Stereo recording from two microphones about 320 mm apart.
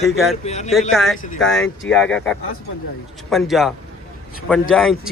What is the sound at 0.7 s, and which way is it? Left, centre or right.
A man's voice, centre.